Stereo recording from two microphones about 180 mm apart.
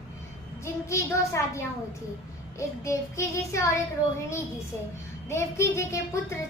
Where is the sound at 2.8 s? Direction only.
15° left (ahead or behind).